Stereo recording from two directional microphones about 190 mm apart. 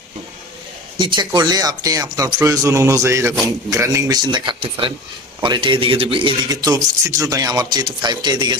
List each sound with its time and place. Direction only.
0.9 s speech: 25° right (ahead or behind)